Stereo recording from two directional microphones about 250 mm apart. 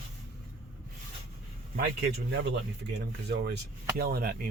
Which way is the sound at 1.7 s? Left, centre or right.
Right.